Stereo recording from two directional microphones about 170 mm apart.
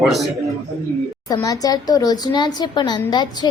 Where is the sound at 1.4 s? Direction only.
20° left (ahead or behind).